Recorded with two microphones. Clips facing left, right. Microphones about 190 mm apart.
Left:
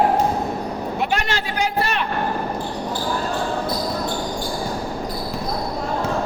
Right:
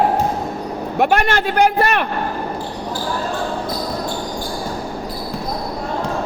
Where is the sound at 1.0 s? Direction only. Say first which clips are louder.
Right 9 dB; 55° right (ahead or behind).